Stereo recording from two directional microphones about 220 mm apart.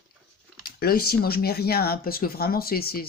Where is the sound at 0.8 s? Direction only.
45° left (ahead or behind).